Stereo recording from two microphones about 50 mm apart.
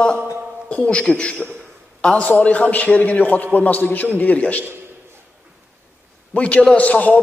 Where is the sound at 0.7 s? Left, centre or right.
Left.